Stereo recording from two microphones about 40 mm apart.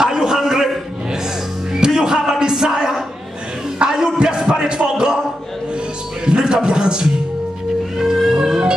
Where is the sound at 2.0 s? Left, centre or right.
Centre.